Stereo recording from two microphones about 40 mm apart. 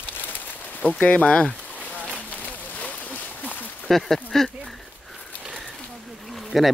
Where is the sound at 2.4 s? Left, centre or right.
Left.